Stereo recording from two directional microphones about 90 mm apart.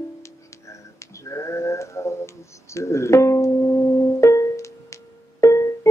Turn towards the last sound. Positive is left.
turn(degrees=35)  # may be behind; listen again after turning